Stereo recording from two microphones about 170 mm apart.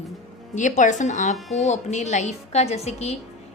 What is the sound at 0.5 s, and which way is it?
A woman's voice, 45° left (ahead or behind).